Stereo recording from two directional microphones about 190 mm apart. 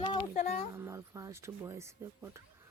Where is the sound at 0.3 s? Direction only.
40° left (ahead or behind).